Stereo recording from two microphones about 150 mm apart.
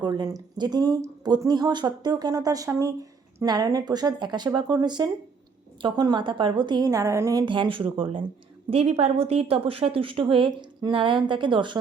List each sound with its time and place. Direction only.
0.0 s speech: 30° right (ahead or behind)
7.4 s a woman's voice: 35° right (ahead or behind)